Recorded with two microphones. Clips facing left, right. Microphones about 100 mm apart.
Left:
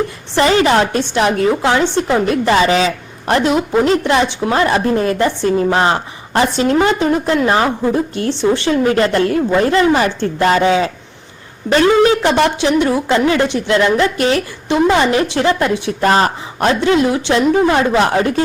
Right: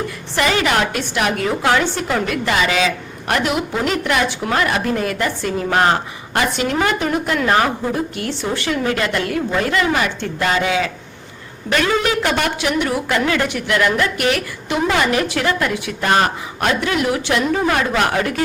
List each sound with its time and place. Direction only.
0.3 s a woman's voice: 30° left (ahead or behind)